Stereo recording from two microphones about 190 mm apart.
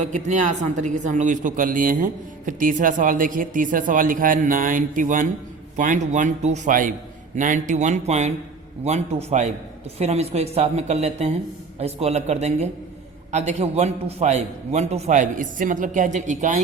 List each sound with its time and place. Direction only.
0.0 s a man's voice: 40° right (ahead or behind)